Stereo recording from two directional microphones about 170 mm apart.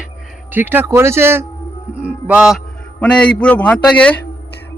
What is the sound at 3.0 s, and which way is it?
A man's voice, 5° left (ahead or behind).